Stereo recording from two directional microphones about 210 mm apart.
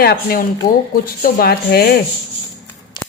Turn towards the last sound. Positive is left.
turn(degrees=20)  # may be behind; listen again after turning